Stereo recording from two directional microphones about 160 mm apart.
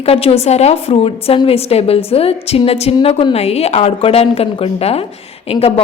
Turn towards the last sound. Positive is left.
turn(degrees=40)  # may be behind; listen again after turning